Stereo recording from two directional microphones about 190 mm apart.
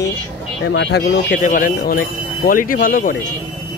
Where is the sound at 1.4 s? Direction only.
45° left (ahead or behind).